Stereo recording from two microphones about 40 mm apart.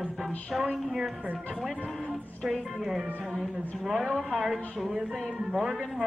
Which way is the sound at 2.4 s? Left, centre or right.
Centre.